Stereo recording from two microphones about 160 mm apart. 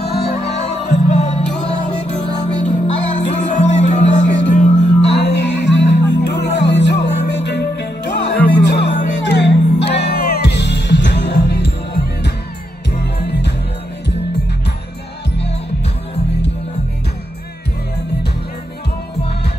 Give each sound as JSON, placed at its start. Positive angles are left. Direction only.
{"t": 0.0, "sound": "music", "side_deg": 85}
{"t": 0.4, "sound": "music", "side_deg": 45}
{"t": 2.6, "sound": "music", "side_deg": 50}
{"t": 5.1, "sound": "music", "side_deg": 90}